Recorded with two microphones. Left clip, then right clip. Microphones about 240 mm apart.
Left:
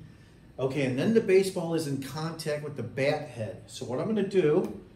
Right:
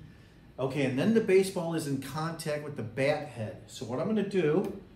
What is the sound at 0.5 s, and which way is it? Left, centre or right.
Speech, centre.